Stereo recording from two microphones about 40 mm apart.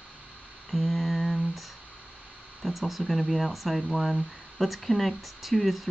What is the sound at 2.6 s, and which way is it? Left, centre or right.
Speech, centre.